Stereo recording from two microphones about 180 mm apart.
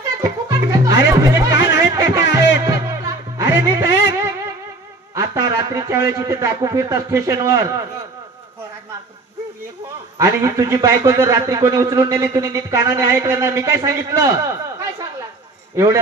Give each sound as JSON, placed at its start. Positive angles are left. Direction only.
{"t": 0.2, "sound": "music", "side_deg": -20}
{"t": 5.1, "sound": "speech", "side_deg": -20}
{"t": 10.1, "sound": "a man's voice", "side_deg": -15}